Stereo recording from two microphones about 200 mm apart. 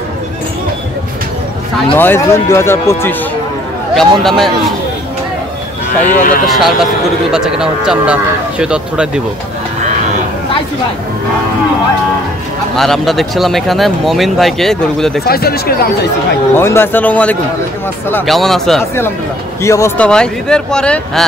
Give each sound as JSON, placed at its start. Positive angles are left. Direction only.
{"t": 2.0, "sound": "speech", "side_deg": 10}
{"t": 3.9, "sound": "a man's voice", "side_deg": 0}
{"t": 6.0, "sound": "speech", "side_deg": 45}
{"t": 6.4, "sound": "a man's voice", "side_deg": 0}
{"t": 12.7, "sound": "a man's voice", "side_deg": 0}
{"t": 15.2, "sound": "speech", "side_deg": 50}
{"t": 16.5, "sound": "a man's voice", "side_deg": 10}
{"t": 19.6, "sound": "speech", "side_deg": 15}
{"t": 20.1, "sound": "a man's voice", "side_deg": 5}